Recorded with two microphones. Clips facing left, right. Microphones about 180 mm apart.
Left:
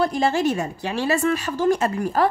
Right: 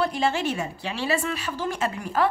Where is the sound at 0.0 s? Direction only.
40° left (ahead or behind).